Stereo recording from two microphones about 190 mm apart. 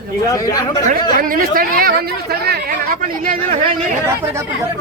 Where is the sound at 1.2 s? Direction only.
50° right (ahead or behind).